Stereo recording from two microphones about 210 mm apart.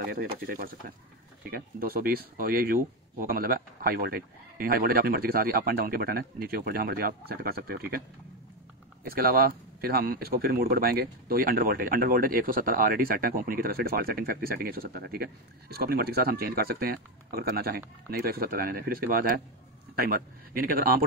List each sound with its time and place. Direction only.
0.0 s speech: 45° right (ahead or behind)
9.0 s speech: 45° right (ahead or behind)